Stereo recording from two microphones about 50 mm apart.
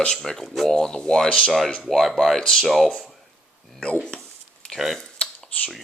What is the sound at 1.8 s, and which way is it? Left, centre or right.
Speech, centre.